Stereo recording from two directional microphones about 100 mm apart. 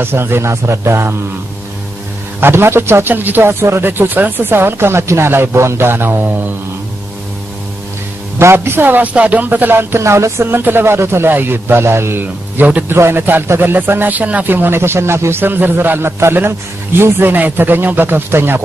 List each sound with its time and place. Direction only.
0.0 s a man's voice: 25° right (ahead or behind)
2.4 s a man's voice: 25° right (ahead or behind)
8.4 s a man's voice: 25° right (ahead or behind)